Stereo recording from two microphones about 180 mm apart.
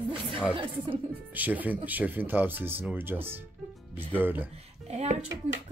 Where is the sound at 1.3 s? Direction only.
10° right (ahead or behind).